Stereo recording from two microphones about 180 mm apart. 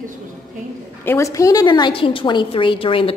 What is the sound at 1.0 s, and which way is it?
A woman's voice, 15° left (ahead or behind).